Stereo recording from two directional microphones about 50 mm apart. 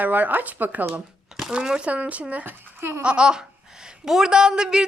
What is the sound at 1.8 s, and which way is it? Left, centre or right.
Speech, right.